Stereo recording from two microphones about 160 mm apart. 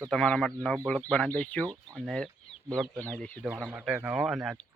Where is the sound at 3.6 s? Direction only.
5° right (ahead or behind).